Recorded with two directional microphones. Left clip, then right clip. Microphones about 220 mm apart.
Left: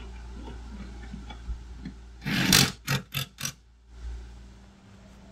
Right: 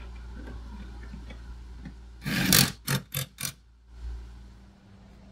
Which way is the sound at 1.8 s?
20° right (ahead or behind).